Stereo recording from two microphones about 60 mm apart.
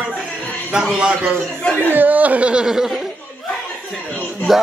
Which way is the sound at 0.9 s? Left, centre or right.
Centre.